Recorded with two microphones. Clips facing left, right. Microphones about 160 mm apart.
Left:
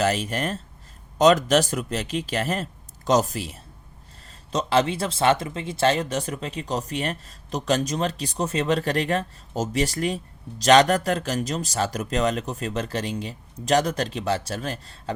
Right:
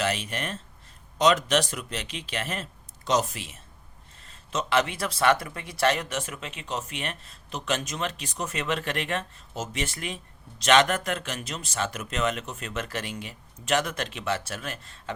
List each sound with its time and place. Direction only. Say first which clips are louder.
0.0 s speech: left 5 dB; 40° left (ahead or behind)